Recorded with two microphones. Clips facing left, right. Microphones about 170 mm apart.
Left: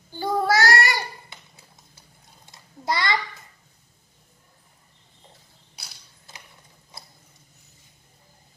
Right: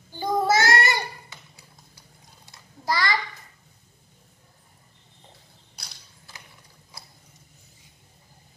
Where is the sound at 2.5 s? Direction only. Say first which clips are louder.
Left 1 dB; 20° left (ahead or behind).